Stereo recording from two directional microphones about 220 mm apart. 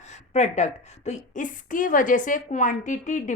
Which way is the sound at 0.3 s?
30° left (ahead or behind).